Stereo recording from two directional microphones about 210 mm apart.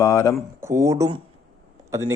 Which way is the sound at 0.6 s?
15° right (ahead or behind).